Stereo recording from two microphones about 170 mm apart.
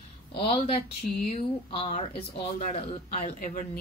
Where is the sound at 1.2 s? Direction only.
35° left (ahead or behind).